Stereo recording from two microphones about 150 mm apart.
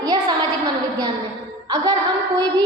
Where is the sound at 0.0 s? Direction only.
25° right (ahead or behind).